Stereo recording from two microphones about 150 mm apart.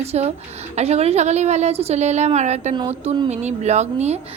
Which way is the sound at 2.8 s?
35° right (ahead or behind).